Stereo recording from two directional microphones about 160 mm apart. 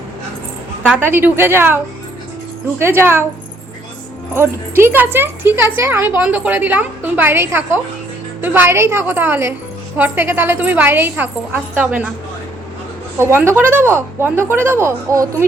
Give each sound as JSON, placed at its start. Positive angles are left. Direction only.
{"t": 0.9, "sound": "speech", "side_deg": -10}
{"t": 4.4, "sound": "speech", "side_deg": -15}
{"t": 13.1, "sound": "speech", "side_deg": -15}